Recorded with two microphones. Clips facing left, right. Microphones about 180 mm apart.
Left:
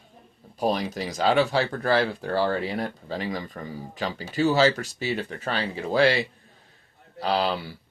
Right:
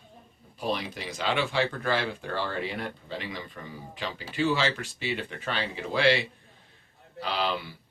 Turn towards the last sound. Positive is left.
turn(degrees=40)  # may be behind; listen again after turning